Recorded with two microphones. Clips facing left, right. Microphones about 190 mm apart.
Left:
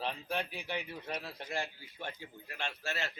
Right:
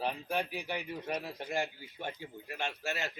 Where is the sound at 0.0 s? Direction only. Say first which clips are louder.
Right 3 dB; 15° right (ahead or behind).